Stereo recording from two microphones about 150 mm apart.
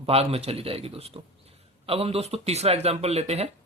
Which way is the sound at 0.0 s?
40° right (ahead or behind).